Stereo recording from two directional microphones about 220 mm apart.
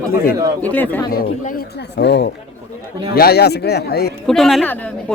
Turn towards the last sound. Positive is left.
turn(degrees=5)  # may be behind; listen again after turning